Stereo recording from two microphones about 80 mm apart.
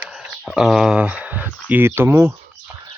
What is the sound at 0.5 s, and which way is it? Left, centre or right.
Speech, centre.